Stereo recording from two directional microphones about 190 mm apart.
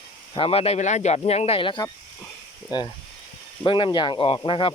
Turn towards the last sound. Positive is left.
turn(degrees=25)  # may be behind; listen again after turning